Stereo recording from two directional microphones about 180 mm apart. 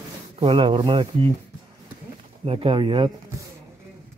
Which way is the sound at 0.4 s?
30° right (ahead or behind).